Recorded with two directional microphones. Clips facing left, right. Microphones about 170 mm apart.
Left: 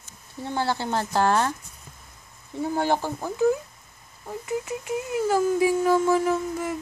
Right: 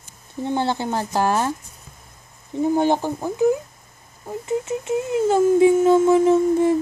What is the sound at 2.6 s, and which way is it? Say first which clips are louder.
Speech: right 6 dB; 20° right (ahead or behind).